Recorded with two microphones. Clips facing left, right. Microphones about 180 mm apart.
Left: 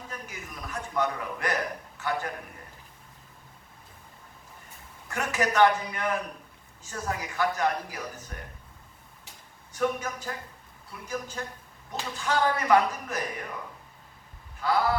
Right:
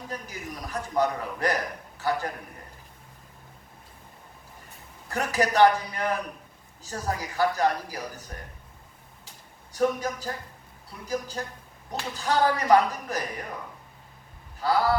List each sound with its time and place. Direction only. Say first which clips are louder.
0.1 s a sound: right 4 dB; 35° right (ahead or behind)
2.0 s a man's voice: right 3 dB; 35° right (ahead or behind)
5.0 s speech: right 2 dB; 35° right (ahead or behind)
9.7 s speech: right 3 dB; 35° right (ahead or behind)
14.6 s speech: right 2 dB; 35° right (ahead or behind)